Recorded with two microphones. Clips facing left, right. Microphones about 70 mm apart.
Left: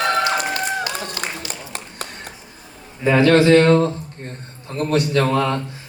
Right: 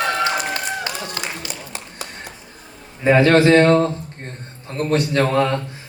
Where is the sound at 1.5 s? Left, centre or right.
Left.